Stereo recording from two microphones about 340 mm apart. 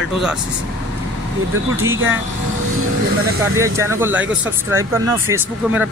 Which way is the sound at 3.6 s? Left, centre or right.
Centre.